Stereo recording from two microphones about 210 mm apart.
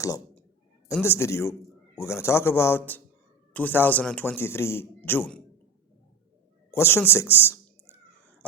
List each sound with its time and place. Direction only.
0.0 s clicking: 15° left (ahead or behind)
0.9 s a man's voice: 10° left (ahead or behind)
6.7 s a man's voice: 10° left (ahead or behind)